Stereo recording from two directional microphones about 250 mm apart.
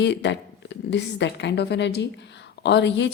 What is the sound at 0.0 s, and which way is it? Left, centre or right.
A woman's voice, left.